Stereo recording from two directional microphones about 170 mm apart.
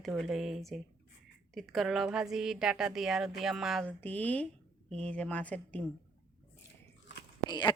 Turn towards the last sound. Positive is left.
turn(degrees=25)  # may be behind; listen again after turning